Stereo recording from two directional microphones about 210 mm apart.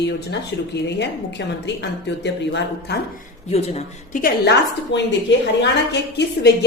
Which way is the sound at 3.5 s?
30° left (ahead or behind).